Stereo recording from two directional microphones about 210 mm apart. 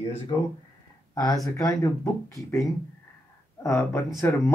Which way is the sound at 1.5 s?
15° left (ahead or behind).